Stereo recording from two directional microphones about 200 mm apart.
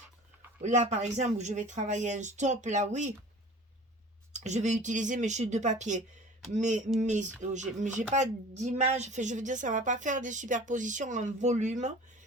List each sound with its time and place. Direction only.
0.6 s a woman's voice: 35° right (ahead or behind)
4.3 s a woman's voice: 35° right (ahead or behind)